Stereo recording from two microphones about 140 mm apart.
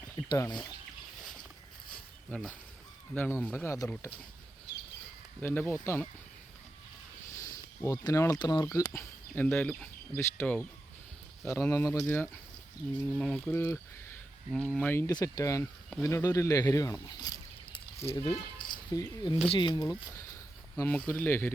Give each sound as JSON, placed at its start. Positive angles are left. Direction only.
{"t": 0.3, "sound": "speech", "side_deg": 30}
{"t": 2.3, "sound": "speech", "side_deg": 5}
{"t": 5.4, "sound": "speech", "side_deg": 15}
{"t": 7.3, "sound": "a sound", "side_deg": 20}
{"t": 8.4, "sound": "a man's voice", "side_deg": 30}
{"t": 15.0, "sound": "a man's voice", "side_deg": 25}
{"t": 18.0, "sound": "a man's voice", "side_deg": 20}
{"t": 20.7, "sound": "speech", "side_deg": 15}